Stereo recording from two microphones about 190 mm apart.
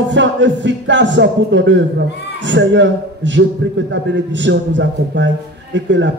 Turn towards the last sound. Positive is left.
turn(degrees=-70)  # may be behind; listen again after turning